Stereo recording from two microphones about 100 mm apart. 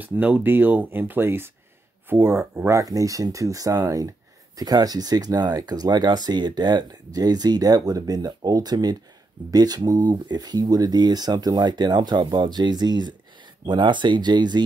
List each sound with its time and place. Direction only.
0.0 s speech: 15° right (ahead or behind); by 14.6 s 45° right (ahead or behind)